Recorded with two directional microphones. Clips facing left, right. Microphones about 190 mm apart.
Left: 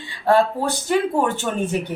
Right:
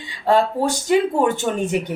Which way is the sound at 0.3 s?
15° right (ahead or behind).